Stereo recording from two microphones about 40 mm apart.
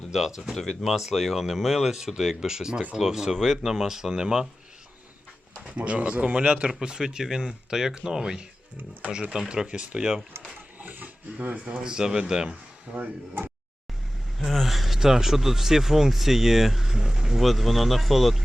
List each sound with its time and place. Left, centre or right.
0.1 s speech: centre
0.6 s speech: centre
0.9 s speech: centre
5.6 s speech: right; by 8.4 s centre
9.6 s speech: right
10.8 s a sound: right
11.8 s speech: centre
13.0 s speech: right
14.3 s speech: centre
14.9 s speech: centre